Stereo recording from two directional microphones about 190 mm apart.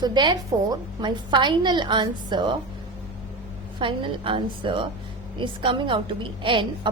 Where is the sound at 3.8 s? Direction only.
25° right (ahead or behind).